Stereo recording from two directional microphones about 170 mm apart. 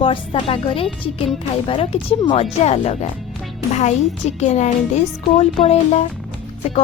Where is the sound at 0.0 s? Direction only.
30° left (ahead or behind).